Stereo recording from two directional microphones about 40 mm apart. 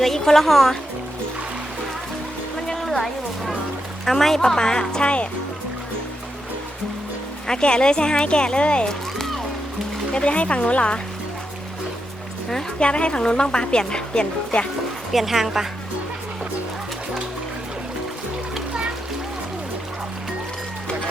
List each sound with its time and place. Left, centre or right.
0.0 s speech: centre
2.6 s a sound: centre
4.0 s speech: centre; by 5.3 s left
7.4 s a woman's voice: centre
10.1 s speech: left
12.8 s a woman's voice: left
15.1 s a woman's voice: centre